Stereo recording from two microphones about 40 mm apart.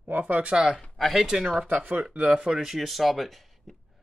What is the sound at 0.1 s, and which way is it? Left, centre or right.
Speech, right.